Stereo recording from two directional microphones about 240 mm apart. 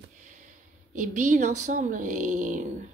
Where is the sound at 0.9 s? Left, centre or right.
Right.